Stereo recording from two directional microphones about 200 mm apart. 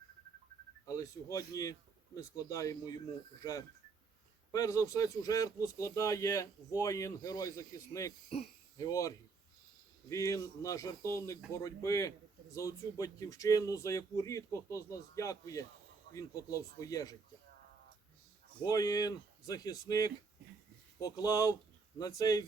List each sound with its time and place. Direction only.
0.9 s a man's voice: 15° left (ahead or behind)
4.5 s a man's voice: 15° left (ahead or behind)
18.6 s speech: 20° left (ahead or behind)